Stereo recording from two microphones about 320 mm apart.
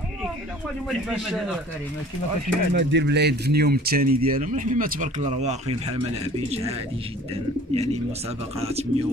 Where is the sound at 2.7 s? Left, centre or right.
Right.